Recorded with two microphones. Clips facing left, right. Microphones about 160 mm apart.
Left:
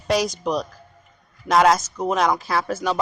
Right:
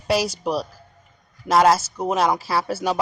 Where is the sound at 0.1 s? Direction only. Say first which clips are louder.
Even; 5° right (ahead or behind).